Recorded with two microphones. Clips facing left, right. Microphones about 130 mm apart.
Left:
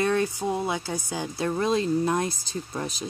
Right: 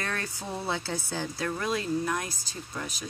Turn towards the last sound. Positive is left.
turn(degrees=30)  # may be behind; listen again after turning